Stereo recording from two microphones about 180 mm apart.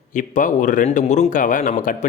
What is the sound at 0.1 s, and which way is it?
Speech, 45° left (ahead or behind).